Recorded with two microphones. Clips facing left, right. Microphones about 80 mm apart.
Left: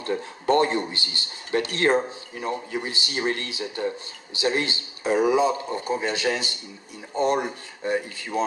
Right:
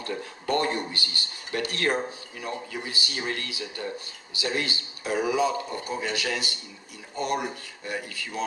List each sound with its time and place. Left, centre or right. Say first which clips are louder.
0.0 s speech: left 6 dB; left